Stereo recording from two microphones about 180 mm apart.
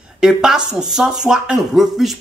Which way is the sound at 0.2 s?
5° right (ahead or behind).